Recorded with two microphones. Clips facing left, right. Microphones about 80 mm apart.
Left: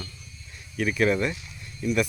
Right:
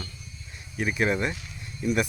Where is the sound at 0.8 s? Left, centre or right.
Centre.